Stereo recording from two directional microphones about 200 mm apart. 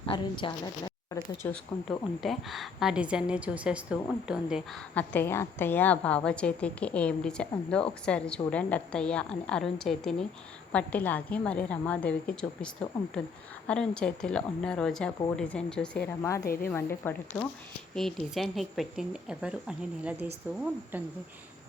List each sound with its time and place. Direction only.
0.0 s a woman's voice: 25° left (ahead or behind)
2.2 s a woman's voice: centre (ahead or behind)
16.4 s a woman's voice: 50° left (ahead or behind)
16.6 s a woman's voice: 10° left (ahead or behind); by 21.0 s 10° right (ahead or behind)